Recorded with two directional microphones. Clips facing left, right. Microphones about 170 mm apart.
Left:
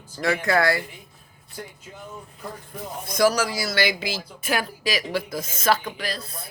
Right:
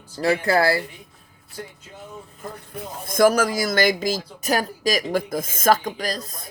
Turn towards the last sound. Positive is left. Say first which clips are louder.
# right 3 dB
turn(degrees=-45)  # may be behind; listen again after turning